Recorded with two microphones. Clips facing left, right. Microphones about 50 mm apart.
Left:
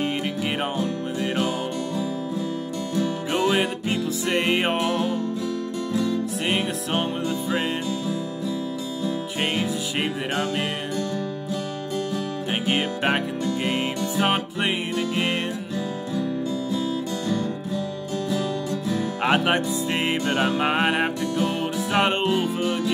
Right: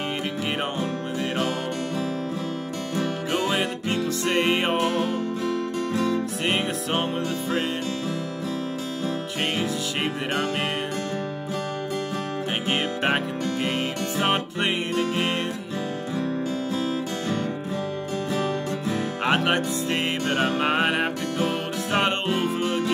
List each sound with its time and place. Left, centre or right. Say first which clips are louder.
3.3 s music: left 3 dB; left
4.2 s music: even; centre
4.9 s music: left 1 dB; right
6.4 s music: even; centre
9.4 s music: left 1 dB; centre
12.6 s music: left 1 dB; centre
14.2 s music: even; centre
18.3 s music: even; right
19.2 s music: left 1 dB; centre
22.3 s music: left 1 dB; right